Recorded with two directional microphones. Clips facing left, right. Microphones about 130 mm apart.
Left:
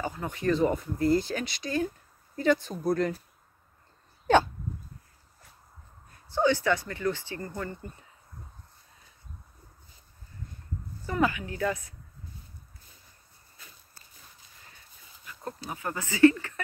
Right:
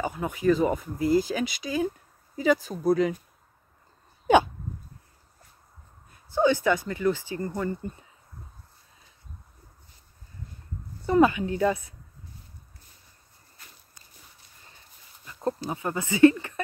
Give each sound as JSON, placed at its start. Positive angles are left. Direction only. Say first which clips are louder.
{"t": 0.0, "sound": "speech", "louder": "right 5 dB", "side_deg": -10}
{"t": 6.3, "sound": "speech", "louder": "right 3 dB", "side_deg": -15}
{"t": 11.1, "sound": "speech", "louder": "right 7 dB", "side_deg": -25}
{"t": 15.2, "sound": "speech", "louder": "right 9 dB", "side_deg": -25}